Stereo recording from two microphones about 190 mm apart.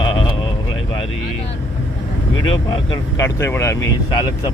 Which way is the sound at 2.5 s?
25° left (ahead or behind).